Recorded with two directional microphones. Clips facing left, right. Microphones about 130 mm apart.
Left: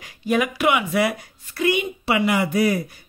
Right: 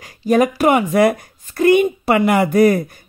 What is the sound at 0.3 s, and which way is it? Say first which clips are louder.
Speech: right 6 dB; 40° right (ahead or behind).